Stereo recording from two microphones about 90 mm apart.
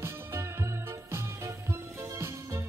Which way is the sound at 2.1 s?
35° right (ahead or behind).